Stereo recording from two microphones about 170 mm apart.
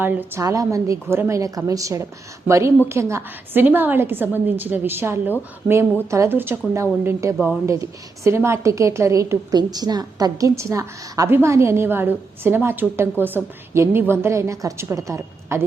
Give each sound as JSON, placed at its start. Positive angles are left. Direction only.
{"t": 0.0, "sound": "a woman's voice", "side_deg": -15}